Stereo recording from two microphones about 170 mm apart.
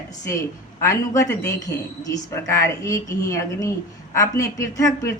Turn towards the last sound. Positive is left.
turn(degrees=20)  # may be behind; listen again after turning